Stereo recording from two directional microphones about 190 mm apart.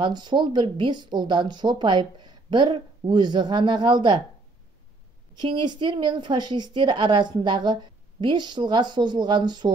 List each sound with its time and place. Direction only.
0.0 s a woman's voice: 25° right (ahead or behind)
5.3 s a woman's voice: 25° right (ahead or behind)